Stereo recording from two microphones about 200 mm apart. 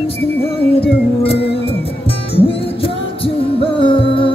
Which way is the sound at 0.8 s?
30° left (ahead or behind).